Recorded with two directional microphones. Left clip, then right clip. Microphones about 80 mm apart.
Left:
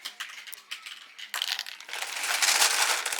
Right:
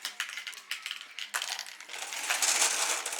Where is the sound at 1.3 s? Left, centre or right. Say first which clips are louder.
Left 5 dB; centre.